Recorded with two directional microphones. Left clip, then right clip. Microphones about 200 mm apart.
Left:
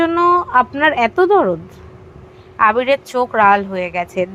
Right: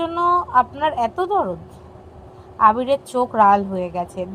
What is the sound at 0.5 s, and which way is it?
Speech, 30° left (ahead or behind).